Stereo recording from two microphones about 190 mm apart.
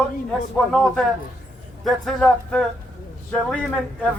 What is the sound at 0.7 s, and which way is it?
A man's voice, centre (ahead or behind).